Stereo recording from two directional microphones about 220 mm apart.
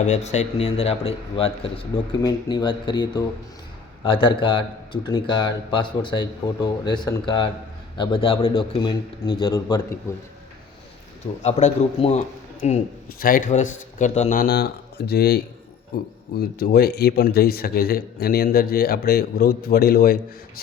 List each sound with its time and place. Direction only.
0.0 s a man's voice: 30° left (ahead or behind)
11.4 s a man's voice: 30° left (ahead or behind)